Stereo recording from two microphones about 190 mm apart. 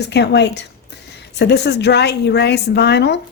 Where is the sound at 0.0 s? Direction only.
65° left (ahead or behind).